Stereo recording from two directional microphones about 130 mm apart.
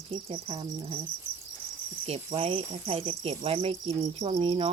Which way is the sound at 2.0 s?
50° right (ahead or behind).